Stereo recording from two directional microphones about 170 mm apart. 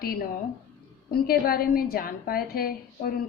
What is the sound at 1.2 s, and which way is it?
A woman's voice, 60° left (ahead or behind).